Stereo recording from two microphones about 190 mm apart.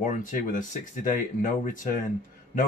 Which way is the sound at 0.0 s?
45° left (ahead or behind).